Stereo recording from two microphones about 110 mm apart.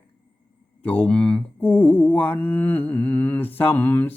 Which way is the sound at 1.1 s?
10° left (ahead or behind).